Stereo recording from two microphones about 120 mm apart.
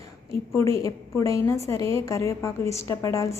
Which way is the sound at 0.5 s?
25° left (ahead or behind).